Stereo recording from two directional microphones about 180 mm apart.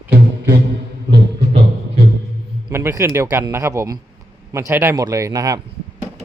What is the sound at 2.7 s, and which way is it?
A man's voice, 15° right (ahead or behind).